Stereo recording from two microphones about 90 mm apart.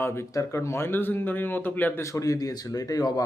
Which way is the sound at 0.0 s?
30° left (ahead or behind).